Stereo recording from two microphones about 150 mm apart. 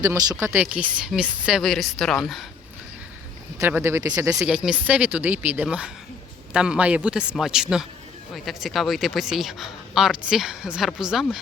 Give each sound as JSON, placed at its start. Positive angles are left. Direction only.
{"t": 0.0, "sound": "speech", "side_deg": -25}
{"t": 0.4, "sound": "speech", "side_deg": -10}
{"t": 3.6, "sound": "speech", "side_deg": -15}
{"t": 4.4, "sound": "speech", "side_deg": -5}